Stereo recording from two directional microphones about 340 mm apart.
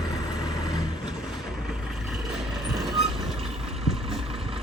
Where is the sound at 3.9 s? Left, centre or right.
Centre.